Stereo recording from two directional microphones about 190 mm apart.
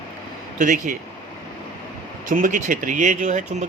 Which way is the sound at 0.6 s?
45° right (ahead or behind).